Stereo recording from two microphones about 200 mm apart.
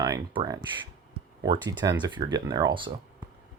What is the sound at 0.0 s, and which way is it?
Speech, 20° right (ahead or behind).